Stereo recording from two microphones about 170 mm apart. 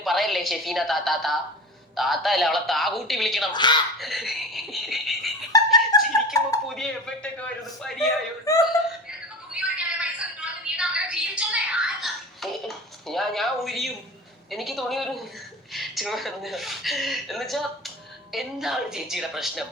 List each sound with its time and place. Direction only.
0.0 s speech: centre (ahead or behind)
3.5 s speech: 25° left (ahead or behind)
3.9 s speech: centre (ahead or behind)
5.5 s snicker: 20° left (ahead or behind)
5.9 s chuckle: 25° left (ahead or behind)
6.3 s a sound: 20° left (ahead or behind)
6.7 s a man's voice: 5° left (ahead or behind)
8.5 s speech: 20° left (ahead or behind)
9.0 s a sound: 5° right (ahead or behind)
14.5 s speech: centre (ahead or behind)